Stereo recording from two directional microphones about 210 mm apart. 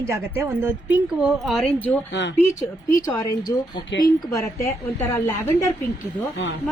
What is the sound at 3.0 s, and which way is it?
Speech, 20° left (ahead or behind).